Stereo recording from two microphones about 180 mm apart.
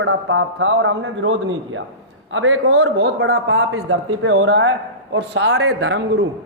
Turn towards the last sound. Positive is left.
turn(degrees=-80)